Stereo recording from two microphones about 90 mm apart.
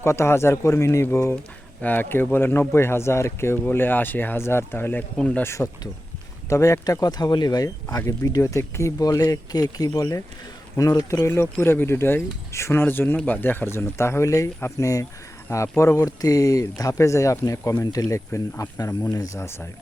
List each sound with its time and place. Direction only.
0.0 s speech: 30° left (ahead or behind)
11.2 s speech: 25° left (ahead or behind)
16.0 s speech: 40° left (ahead or behind)